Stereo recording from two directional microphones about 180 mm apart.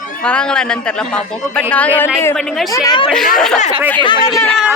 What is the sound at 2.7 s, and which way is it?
Speech, 20° left (ahead or behind).